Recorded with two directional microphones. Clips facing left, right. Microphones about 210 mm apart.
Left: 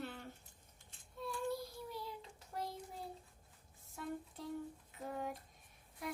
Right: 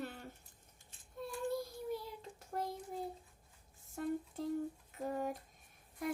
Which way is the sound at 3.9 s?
45° right (ahead or behind).